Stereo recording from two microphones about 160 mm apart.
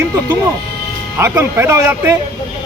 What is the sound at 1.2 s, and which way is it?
Speech, 15° right (ahead or behind).